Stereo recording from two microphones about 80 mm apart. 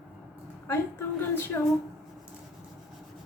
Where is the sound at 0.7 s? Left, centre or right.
Left.